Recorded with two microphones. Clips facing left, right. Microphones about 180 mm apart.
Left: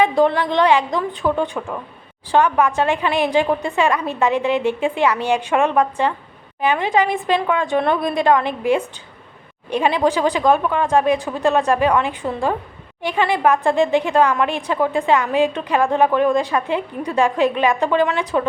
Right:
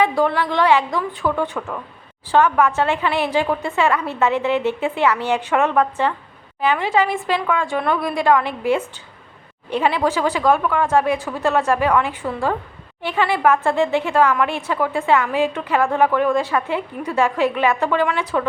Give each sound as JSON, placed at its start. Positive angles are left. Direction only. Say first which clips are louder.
{"t": 0.0, "sound": "speech", "louder": "left 2 dB", "side_deg": 20}